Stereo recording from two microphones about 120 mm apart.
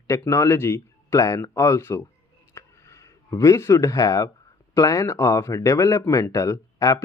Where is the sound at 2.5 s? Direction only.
25° left (ahead or behind).